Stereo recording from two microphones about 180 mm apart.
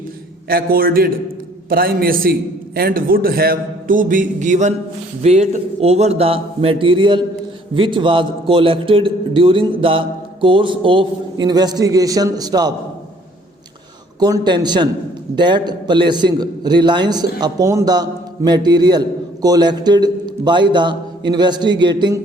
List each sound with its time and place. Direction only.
0.4 s a man's voice: 55° right (ahead or behind); by 12.7 s 20° right (ahead or behind)
14.2 s a man's voice: 20° right (ahead or behind)